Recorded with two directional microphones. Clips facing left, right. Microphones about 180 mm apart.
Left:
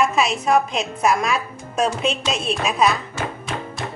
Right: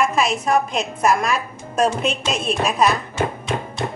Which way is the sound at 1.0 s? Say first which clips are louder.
Right 1 dB; centre (ahead or behind).